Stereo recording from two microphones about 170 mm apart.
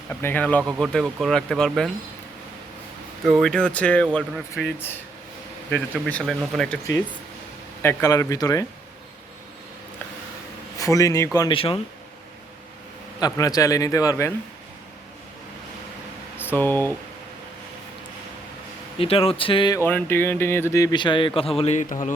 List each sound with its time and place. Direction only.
0.1 s speech: 10° left (ahead or behind)
3.2 s speech: centre (ahead or behind)
6.1 s speech: 5° left (ahead or behind)
7.8 s a man's voice: 15° left (ahead or behind)
10.8 s a man's voice: 20° left (ahead or behind)
13.1 s a man's voice: 20° left (ahead or behind)
16.4 s speech: 10° left (ahead or behind)
18.9 s speech: 35° left (ahead or behind)
19.8 s speech: 10° left (ahead or behind); by 21.5 s 30° left (ahead or behind)
21.6 s a man's voice: 45° left (ahead or behind)